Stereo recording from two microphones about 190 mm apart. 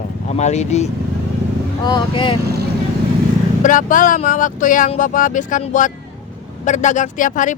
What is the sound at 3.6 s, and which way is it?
Speech, 45° left (ahead or behind).